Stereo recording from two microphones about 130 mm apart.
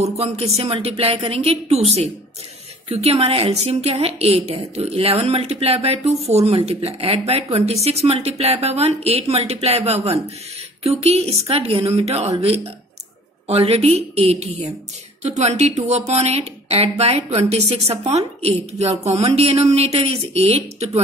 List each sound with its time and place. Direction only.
0.0 s a woman's voice: 55° right (ahead or behind)